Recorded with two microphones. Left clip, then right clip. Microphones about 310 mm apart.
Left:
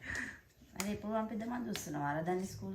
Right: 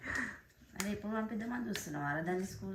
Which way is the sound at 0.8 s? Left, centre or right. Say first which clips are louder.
Left 1 dB; centre.